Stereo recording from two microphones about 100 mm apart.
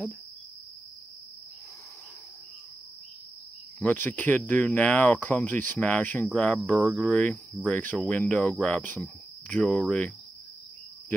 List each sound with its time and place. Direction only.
3.8 s speech: 15° left (ahead or behind)
6.7 s speech: 10° right (ahead or behind)
7.0 s speech: 10° left (ahead or behind)